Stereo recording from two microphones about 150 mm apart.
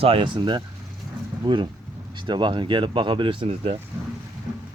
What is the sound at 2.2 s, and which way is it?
Speech, 30° right (ahead or behind).